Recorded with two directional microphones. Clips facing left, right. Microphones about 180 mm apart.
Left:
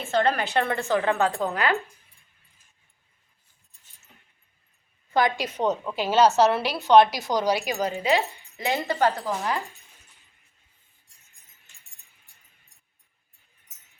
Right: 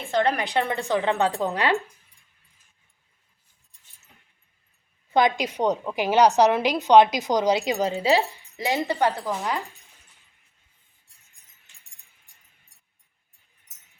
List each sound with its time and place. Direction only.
0.0 s a woman's voice: 15° right (ahead or behind)
5.1 s a woman's voice: 15° right (ahead or behind)